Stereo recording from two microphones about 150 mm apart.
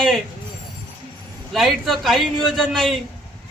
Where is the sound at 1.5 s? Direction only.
Centre (ahead or behind).